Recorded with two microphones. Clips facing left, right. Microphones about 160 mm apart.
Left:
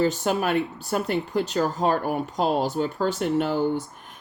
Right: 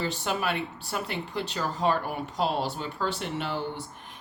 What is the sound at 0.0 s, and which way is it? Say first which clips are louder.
Speech: left 7 dB; 45° left (ahead or behind).